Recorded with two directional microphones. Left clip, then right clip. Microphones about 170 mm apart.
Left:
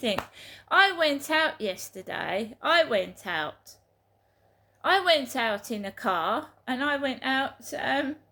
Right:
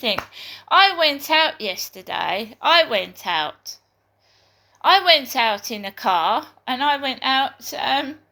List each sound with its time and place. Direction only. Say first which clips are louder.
0.3 s speech: right 6 dB; 35° left (ahead or behind)
4.8 s a woman's voice: right 8 dB; 25° left (ahead or behind)